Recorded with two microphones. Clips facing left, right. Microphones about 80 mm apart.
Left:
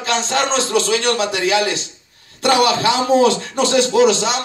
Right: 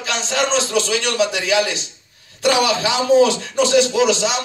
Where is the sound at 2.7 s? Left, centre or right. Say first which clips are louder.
Left 1 dB; left.